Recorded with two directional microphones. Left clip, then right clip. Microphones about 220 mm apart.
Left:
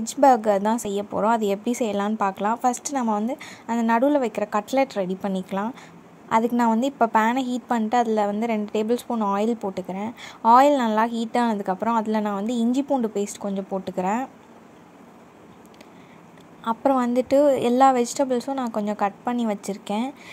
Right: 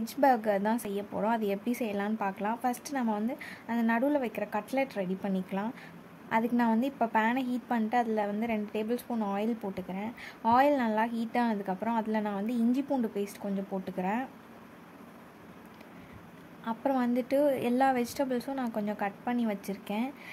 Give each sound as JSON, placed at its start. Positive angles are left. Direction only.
{"t": 0.0, "sound": "a woman's voice", "side_deg": 20}
{"t": 16.6, "sound": "a woman's voice", "side_deg": 20}